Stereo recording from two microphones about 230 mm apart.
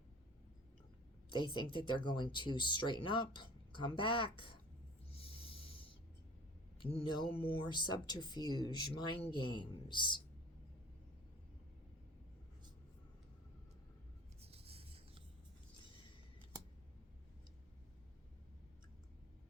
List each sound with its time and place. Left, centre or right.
1.3 s speech: centre
5.1 s a sound: left
6.7 s speech: left
14.4 s rub: right